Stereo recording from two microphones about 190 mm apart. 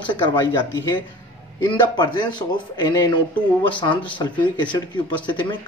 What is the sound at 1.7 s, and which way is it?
Speech, 25° left (ahead or behind).